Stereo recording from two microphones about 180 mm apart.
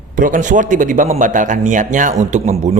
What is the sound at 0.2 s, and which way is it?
Speech, 45° right (ahead or behind).